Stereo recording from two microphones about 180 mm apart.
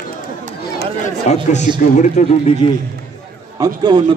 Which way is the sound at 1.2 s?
40° left (ahead or behind).